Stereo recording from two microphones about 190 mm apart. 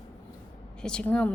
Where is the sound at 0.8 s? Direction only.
5° left (ahead or behind).